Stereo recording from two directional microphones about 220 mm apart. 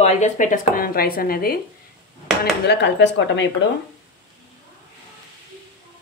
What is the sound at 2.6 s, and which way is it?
Speech, 50° left (ahead or behind).